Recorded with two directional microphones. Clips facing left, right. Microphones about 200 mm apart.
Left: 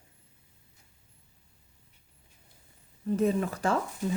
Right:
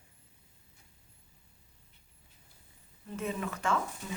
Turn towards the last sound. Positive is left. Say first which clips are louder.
# left 5 dB
turn(degrees=35)  # may be behind; listen again after turning